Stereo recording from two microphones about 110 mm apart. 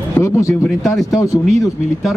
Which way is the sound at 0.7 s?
Centre (ahead or behind).